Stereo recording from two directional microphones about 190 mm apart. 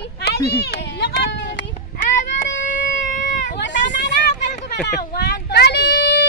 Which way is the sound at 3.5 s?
70° left (ahead or behind).